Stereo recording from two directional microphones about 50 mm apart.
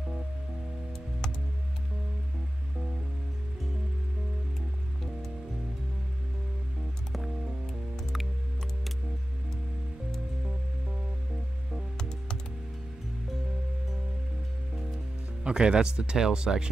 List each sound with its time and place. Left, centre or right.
7.1 s music: centre
15.4 s speech: centre